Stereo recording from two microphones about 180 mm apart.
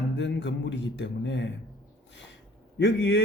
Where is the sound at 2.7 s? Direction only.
80° left.